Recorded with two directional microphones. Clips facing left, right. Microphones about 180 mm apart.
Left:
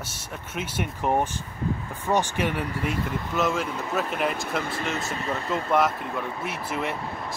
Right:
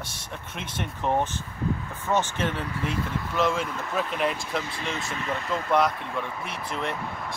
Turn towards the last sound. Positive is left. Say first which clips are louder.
# left 1 dB
turn(degrees=5)  # may be behind; listen again after turning